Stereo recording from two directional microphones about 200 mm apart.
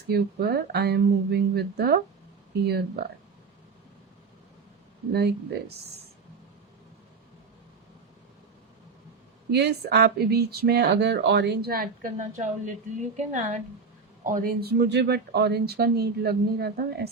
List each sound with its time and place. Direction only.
0.1 s speech: 55° right (ahead or behind)
5.1 s speech: 55° right (ahead or behind)
9.5 s a woman's voice: 55° right (ahead or behind)